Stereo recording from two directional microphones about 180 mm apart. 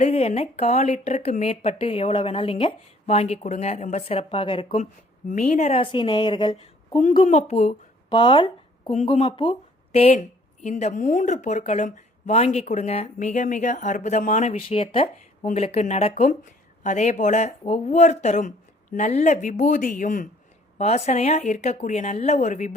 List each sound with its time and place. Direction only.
0.0 s speech: 40° left (ahead or behind)
5.3 s a woman's voice: 45° left (ahead or behind); by 7.0 s 25° left (ahead or behind)
7.3 s a woman's voice: 35° left (ahead or behind)